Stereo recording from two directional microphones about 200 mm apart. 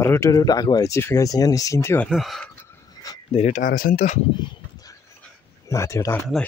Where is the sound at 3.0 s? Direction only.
30° left (ahead or behind).